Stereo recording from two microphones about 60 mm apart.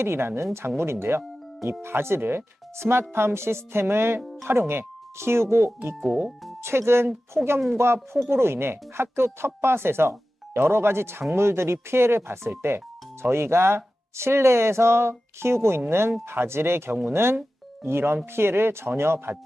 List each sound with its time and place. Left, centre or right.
0.0 s speech: right
4.2 s music: centre
4.4 s speech: right
6.0 s speech: centre
6.6 s speech: right
7.3 s speech: centre
7.8 s speech: right